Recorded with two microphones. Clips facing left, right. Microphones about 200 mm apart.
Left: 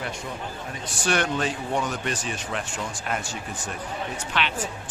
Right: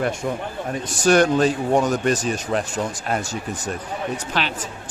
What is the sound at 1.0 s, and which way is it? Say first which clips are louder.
Speech: right 9 dB; 40° right (ahead or behind).